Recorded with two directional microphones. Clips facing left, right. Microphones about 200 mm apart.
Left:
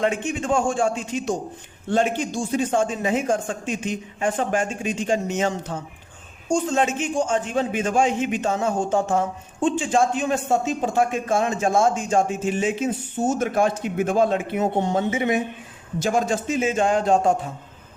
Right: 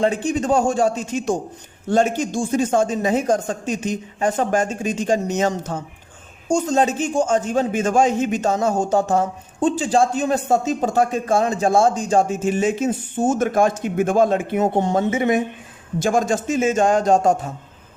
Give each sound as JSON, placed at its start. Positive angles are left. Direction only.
{"t": 0.0, "sound": "a man's voice", "side_deg": -35}